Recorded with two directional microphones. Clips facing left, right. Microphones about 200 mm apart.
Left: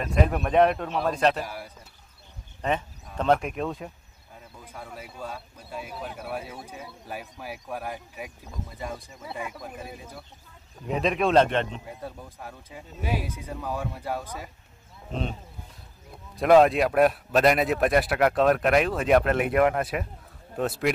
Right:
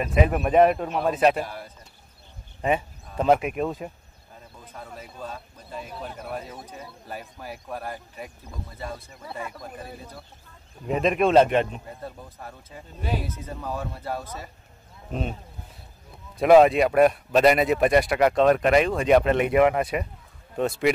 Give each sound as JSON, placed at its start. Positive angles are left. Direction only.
{"t": 0.0, "sound": "a man's voice", "side_deg": -5}
{"t": 1.4, "sound": "speech", "side_deg": 10}
{"t": 2.6, "sound": "a man's voice", "side_deg": -5}
{"t": 4.6, "sound": "a man's voice", "side_deg": 10}
{"t": 11.8, "sound": "speech", "side_deg": 10}
{"t": 16.3, "sound": "a man's voice", "side_deg": 0}